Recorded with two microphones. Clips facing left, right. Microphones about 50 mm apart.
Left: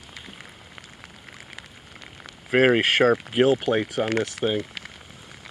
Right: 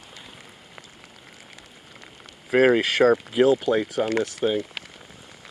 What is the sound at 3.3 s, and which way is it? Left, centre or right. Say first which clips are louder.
Speech: right 1 dB; left.